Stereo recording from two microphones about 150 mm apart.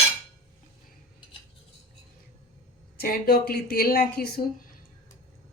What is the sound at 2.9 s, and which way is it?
A woman's voice, 85° left.